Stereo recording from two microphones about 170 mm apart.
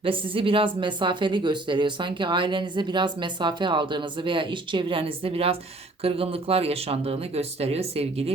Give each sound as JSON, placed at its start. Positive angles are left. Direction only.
{"t": 0.0, "sound": "speech", "side_deg": -30}